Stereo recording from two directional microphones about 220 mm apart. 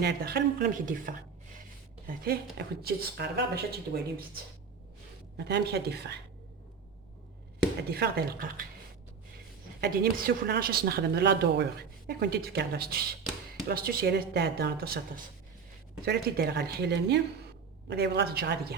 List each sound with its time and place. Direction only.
0.0 s a woman's voice: 45° right (ahead or behind)
5.4 s a woman's voice: 50° right (ahead or behind)
7.8 s a woman's voice: 45° right (ahead or behind)
9.8 s a woman's voice: 40° right (ahead or behind)